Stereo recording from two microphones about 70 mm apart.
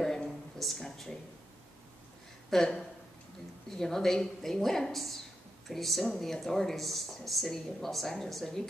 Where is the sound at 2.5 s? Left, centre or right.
Centre.